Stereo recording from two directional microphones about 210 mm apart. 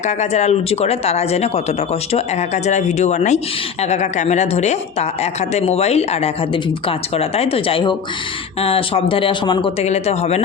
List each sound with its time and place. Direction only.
0.0 s speech: 30° left (ahead or behind)